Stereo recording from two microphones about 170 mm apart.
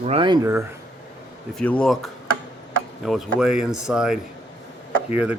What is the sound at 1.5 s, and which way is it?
Speech, 5° left (ahead or behind).